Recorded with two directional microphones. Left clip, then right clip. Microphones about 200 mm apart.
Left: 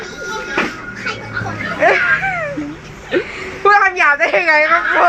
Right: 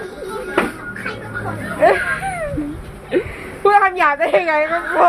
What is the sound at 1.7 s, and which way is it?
Children playing, 10° right (ahead or behind).